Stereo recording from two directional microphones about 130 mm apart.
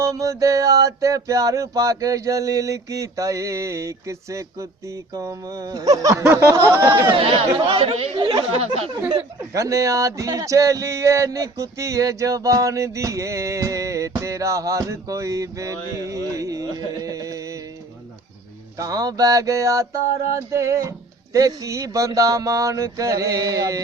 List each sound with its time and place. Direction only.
0.0 s speech: 25° right (ahead or behind)
6.5 s a sound: 20° right (ahead or behind)
7.2 s speech: 40° right (ahead or behind)
9.4 s speech: 25° right (ahead or behind)
18.8 s speech: 30° right (ahead or behind)